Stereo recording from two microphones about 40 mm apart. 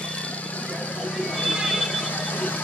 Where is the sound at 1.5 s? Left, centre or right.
Centre.